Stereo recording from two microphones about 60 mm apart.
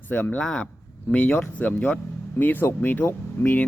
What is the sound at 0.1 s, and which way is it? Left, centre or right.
Speech, left.